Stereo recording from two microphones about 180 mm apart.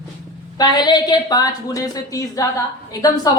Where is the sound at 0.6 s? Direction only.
25° left (ahead or behind).